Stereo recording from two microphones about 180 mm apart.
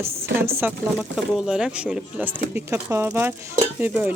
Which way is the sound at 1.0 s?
Centre (ahead or behind).